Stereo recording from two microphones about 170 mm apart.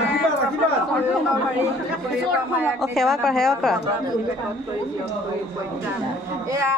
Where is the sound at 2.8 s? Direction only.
Centre (ahead or behind).